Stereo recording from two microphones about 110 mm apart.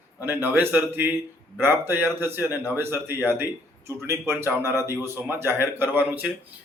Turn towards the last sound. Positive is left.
turn(degrees=-15)  # may be behind; listen again after turning